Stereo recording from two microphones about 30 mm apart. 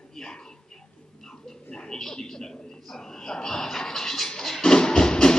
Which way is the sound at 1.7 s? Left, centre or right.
Left.